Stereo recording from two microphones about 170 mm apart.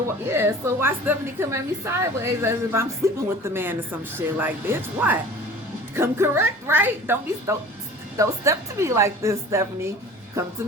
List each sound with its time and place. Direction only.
0.3 s a woman's voice: 15° right (ahead or behind)